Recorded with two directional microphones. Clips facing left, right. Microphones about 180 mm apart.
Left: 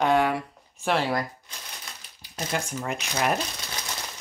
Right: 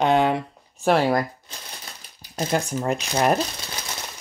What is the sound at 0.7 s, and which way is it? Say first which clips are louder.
Speech: right 6 dB; 45° right (ahead or behind).